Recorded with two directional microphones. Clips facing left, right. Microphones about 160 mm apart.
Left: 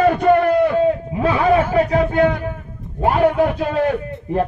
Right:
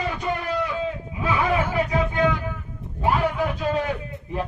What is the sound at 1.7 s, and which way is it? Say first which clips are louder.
A man's voice: left 7 dB; 55° left (ahead or behind).